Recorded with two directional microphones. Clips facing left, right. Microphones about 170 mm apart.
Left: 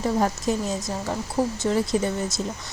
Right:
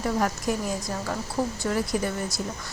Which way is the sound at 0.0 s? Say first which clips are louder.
Left 3 dB; 25° left (ahead or behind).